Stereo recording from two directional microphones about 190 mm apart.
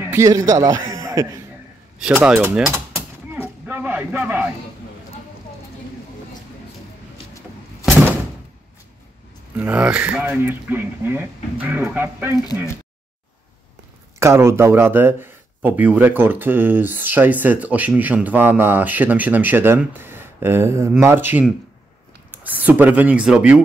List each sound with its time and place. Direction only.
0.1 s speech: 15° right (ahead or behind)
2.0 s speech: 5° right (ahead or behind)
3.3 s a sound: 10° right (ahead or behind)
9.6 s speech: 5° right (ahead or behind)
14.2 s speech: 15° right (ahead or behind)